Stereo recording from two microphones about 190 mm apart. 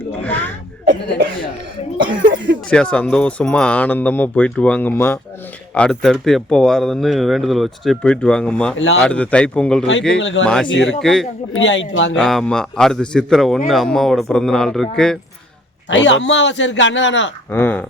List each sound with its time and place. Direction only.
0.2 s a sound: 10° left (ahead or behind)
2.6 s speech: 5° left (ahead or behind)
10.2 s a man's voice: 80° left
10.4 s speech: 5° left (ahead or behind)
10.7 s a man's voice: 80° left
11.0 s speech: centre (ahead or behind)
11.5 s a man's voice: 80° left
12.1 s speech: centre (ahead or behind)
15.9 s a man's voice: 75° left (ahead or behind)
17.5 s speech: 10° left (ahead or behind)